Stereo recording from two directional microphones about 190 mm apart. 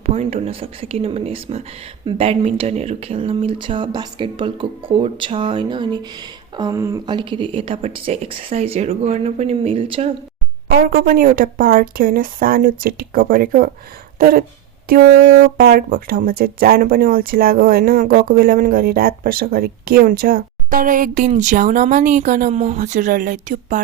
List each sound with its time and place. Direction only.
0.0 s speech: 35° right (ahead or behind)
11.0 s speech: 45° right (ahead or behind)
15.2 s a sound: 90° right
15.5 s speech: 50° right (ahead or behind)